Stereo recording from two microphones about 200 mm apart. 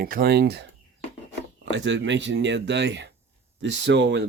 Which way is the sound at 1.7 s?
65° right (ahead or behind).